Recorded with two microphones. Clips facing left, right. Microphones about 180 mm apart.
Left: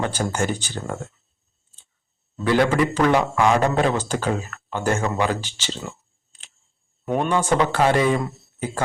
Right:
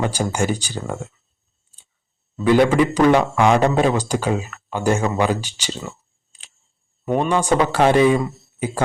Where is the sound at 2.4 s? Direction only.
15° right (ahead or behind).